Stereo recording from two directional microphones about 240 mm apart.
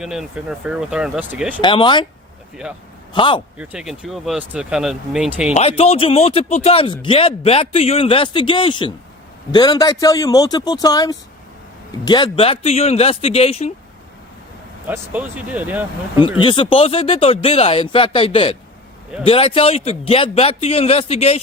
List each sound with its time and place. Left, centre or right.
0.0 s speech: centre
1.6 s speech: centre
3.1 s speech: centre
3.6 s speech: centre
5.5 s a man's voice: left
14.8 s speech: centre
16.4 s speech: left